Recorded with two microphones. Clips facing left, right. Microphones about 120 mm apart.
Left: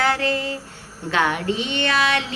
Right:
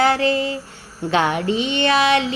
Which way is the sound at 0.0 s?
20° right (ahead or behind).